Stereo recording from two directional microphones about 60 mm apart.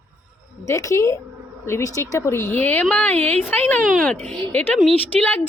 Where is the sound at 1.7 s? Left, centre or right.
Left.